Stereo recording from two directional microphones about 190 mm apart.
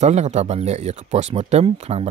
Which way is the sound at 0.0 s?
35° right (ahead or behind).